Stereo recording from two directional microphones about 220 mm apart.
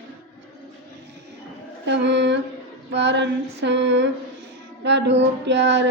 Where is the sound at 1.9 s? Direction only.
50° right (ahead or behind).